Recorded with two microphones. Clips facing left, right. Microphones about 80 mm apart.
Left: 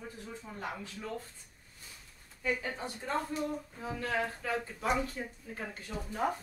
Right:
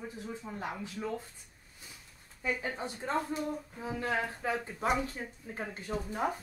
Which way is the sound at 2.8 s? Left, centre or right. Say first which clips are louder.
Right 2 dB; centre.